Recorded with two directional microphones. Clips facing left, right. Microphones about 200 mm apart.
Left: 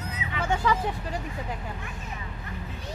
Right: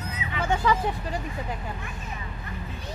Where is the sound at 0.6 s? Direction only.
25° right (ahead or behind).